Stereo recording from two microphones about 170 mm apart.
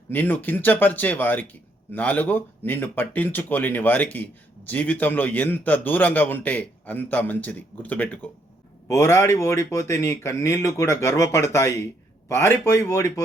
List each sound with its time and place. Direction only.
0.1 s speech: 10° left (ahead or behind)